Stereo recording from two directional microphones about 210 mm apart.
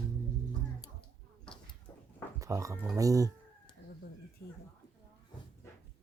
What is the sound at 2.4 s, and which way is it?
Speech, 15° right (ahead or behind).